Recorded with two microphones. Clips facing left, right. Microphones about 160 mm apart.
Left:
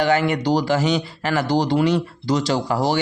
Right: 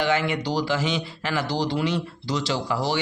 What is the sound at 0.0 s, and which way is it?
Speech, 40° left (ahead or behind).